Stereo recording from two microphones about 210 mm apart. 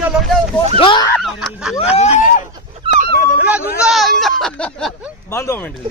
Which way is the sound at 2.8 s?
25° right (ahead or behind).